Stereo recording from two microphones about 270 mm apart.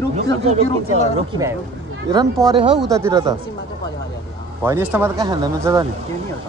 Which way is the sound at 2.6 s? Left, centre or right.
Centre.